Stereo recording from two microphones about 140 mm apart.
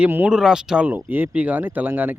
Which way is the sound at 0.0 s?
10° right (ahead or behind).